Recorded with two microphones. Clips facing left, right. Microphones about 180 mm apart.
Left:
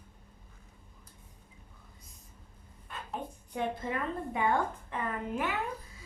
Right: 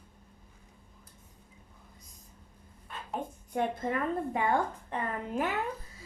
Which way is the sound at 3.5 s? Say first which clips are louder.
Right 3 dB; 45° right (ahead or behind).